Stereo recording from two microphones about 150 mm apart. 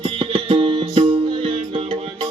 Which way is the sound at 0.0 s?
40° right (ahead or behind).